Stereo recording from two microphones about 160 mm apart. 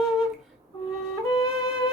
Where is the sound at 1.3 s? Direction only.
25° left (ahead or behind).